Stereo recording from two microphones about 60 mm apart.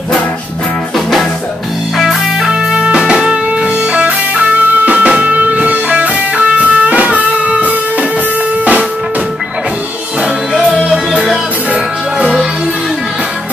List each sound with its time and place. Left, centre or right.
2.0 s music: centre
2.7 s music: centre
10.7 s music: centre